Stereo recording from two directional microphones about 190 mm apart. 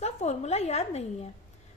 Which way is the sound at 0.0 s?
35° left (ahead or behind).